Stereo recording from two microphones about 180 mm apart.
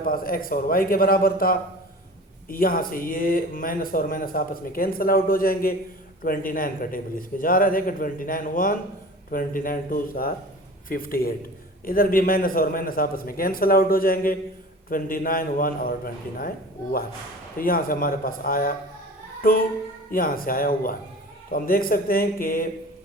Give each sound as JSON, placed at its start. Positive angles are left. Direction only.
{"t": 0.0, "sound": "speech", "side_deg": 55}
{"t": 19.4, "sound": "music", "side_deg": 55}
{"t": 20.1, "sound": "speech", "side_deg": 50}